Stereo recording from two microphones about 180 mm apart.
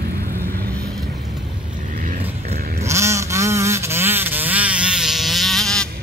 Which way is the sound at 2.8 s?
15° right (ahead or behind).